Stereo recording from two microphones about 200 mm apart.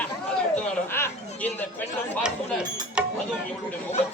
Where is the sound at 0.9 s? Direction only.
10° left (ahead or behind).